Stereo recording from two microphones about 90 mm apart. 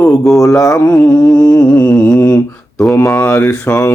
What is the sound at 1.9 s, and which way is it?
Mantra, 10° left (ahead or behind).